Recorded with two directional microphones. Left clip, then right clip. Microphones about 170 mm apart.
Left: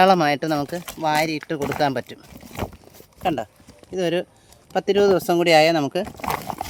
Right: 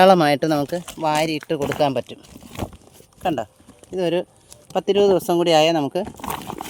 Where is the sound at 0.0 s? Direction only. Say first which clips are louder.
Right 3 dB; 30° right (ahead or behind).